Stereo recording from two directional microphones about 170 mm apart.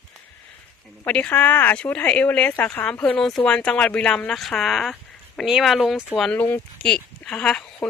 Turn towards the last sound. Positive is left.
turn(degrees=5)  # may be behind; listen again after turning